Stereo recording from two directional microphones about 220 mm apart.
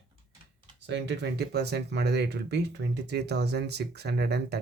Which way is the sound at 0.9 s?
50° right (ahead or behind).